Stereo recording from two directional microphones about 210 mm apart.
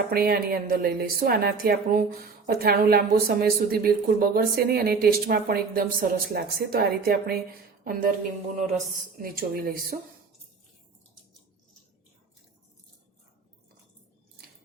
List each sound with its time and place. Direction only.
0.1 s a woman's voice: 45° right (ahead or behind)
8.5 s a woman's voice: 40° right (ahead or behind)